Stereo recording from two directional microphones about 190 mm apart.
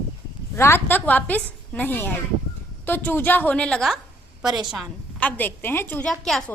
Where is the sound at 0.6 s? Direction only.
10° left (ahead or behind).